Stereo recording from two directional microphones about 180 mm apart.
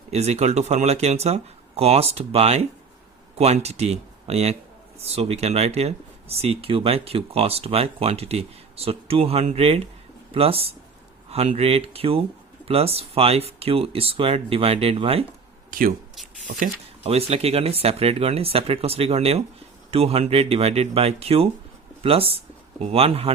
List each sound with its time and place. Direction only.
0.1 s speech: 35° right (ahead or behind)
15.7 s speech: 50° right (ahead or behind)
17.0 s speech: 35° right (ahead or behind)